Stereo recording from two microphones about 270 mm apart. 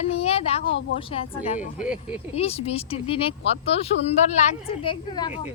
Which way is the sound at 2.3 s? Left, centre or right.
Left.